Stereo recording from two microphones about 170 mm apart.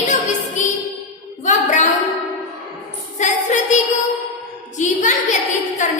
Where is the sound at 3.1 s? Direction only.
45° left (ahead or behind).